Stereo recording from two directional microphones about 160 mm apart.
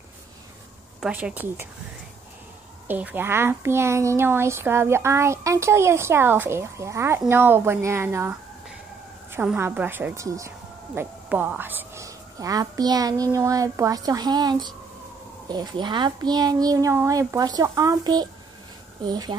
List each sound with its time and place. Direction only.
1.0 s a woman's voice: 10° right (ahead or behind)
2.9 s a woman's voice: 10° right (ahead or behind); by 19.3 s 25° right (ahead or behind)